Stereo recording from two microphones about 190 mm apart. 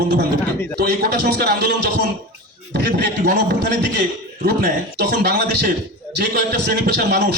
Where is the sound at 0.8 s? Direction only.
55° right (ahead or behind).